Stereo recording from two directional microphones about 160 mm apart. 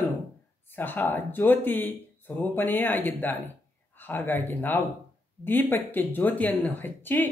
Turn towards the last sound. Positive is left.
turn(degrees=10)  # may be behind; listen again after turning